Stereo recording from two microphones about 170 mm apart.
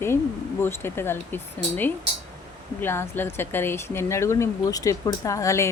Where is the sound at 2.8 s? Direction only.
15° left (ahead or behind).